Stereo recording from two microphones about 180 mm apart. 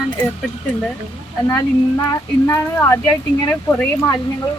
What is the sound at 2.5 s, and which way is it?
Speech, 15° left (ahead or behind).